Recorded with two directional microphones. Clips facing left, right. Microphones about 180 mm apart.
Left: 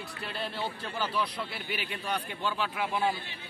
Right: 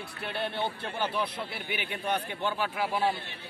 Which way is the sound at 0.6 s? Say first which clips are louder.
Right 2 dB; 25° right (ahead or behind).